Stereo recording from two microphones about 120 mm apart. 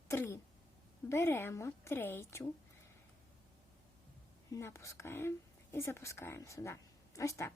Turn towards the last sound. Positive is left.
turn(degrees=25)  # may be behind; listen again after turning